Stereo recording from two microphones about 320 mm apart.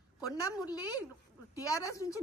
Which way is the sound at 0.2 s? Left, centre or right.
Centre.